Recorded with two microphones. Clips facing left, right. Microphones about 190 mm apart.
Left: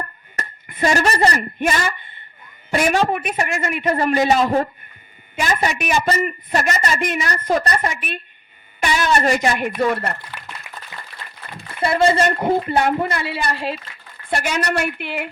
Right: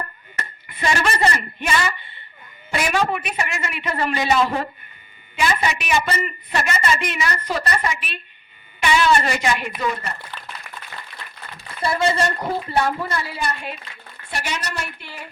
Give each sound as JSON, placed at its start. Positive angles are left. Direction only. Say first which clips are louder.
{"t": 0.3, "sound": "a woman's voice", "louder": "left 6 dB", "side_deg": 40}
{"t": 12.4, "sound": "a man's voice", "louder": "left 4 dB", "side_deg": 25}
{"t": 13.1, "sound": "speech", "louder": "left 3 dB", "side_deg": 70}
{"t": 14.3, "sound": "speech", "louder": "left 7 dB", "side_deg": 50}